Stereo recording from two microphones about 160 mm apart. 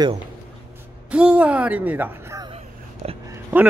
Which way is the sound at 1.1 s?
10° right (ahead or behind).